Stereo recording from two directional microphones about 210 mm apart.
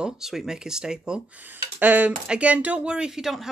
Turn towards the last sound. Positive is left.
turn(degrees=0)  # may be behind; listen again after turning